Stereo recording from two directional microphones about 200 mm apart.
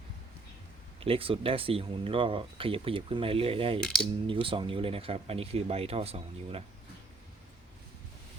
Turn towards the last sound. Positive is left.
turn(degrees=-30)  # may be behind; listen again after turning